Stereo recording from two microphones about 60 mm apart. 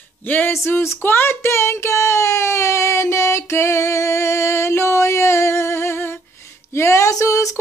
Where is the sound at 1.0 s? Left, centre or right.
Left.